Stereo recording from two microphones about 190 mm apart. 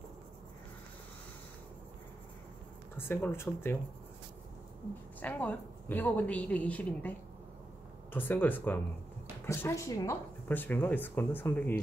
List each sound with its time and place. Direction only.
3.0 s speech: 10° left (ahead or behind)
5.2 s speech: 10° left (ahead or behind)